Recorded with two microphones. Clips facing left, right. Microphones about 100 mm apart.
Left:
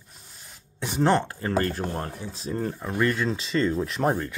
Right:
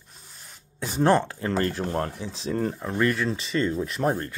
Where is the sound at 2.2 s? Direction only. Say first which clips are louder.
Right 2 dB; 45° left (ahead or behind).